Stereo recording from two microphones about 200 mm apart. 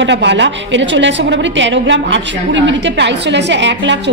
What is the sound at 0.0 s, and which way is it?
A woman's voice, 60° right (ahead or behind).